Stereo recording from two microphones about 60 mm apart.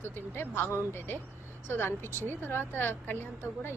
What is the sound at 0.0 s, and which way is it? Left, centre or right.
Speech, left.